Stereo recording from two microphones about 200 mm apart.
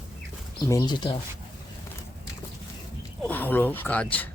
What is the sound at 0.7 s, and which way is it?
Speech, 20° left (ahead or behind).